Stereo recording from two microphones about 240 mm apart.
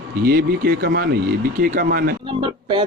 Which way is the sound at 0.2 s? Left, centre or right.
Right.